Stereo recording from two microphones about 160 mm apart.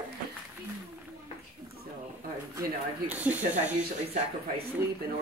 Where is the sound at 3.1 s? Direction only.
10° right (ahead or behind).